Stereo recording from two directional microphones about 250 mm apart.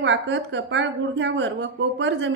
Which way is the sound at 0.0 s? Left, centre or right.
Right.